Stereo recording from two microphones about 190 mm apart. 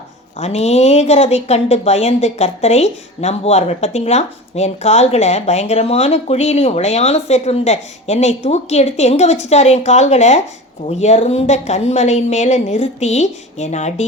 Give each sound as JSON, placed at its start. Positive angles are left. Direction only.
{"t": 0.3, "sound": "speech", "side_deg": 35}